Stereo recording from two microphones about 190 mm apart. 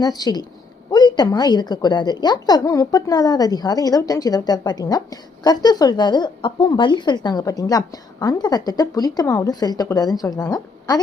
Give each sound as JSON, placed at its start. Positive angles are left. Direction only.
{"t": 0.0, "sound": "a woman's voice", "side_deg": 20}